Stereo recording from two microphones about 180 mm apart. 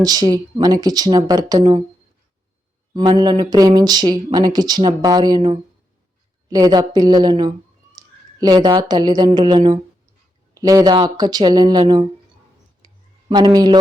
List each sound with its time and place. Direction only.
0.0 s speech: 20° right (ahead or behind)
2.9 s a woman's voice: 25° right (ahead or behind)
12.8 s a sound: 25° right (ahead or behind)